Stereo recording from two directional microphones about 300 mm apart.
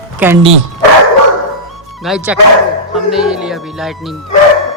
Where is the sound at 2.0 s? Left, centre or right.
Centre.